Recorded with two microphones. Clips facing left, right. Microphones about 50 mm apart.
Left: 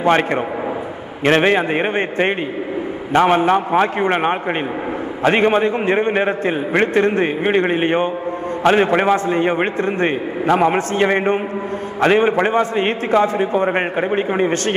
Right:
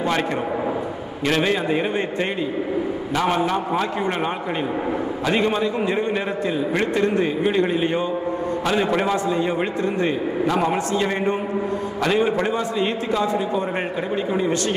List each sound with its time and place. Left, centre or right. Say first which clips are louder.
1.2 s a man's voice: left 6 dB; left